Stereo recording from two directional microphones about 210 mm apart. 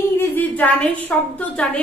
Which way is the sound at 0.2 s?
10° left (ahead or behind).